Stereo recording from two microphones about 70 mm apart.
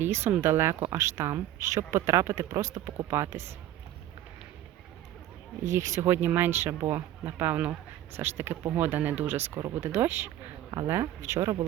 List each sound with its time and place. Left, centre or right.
0.0 s speech: right
3.2 s speech: right
5.7 s speech: right
11.0 s speech: right